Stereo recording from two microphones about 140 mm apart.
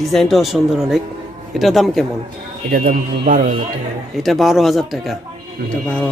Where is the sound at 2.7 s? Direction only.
90° right; by 3.7 s 70° right (ahead or behind).